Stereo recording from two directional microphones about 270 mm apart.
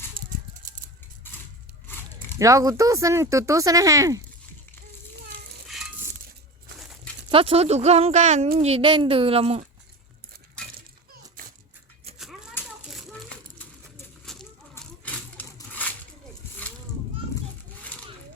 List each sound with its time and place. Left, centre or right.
2.4 s speech: centre
5.6 s stir: centre
6.7 s a sound: centre
7.3 s speech: centre
12.2 s children playing: centre
14.3 s a sound: centre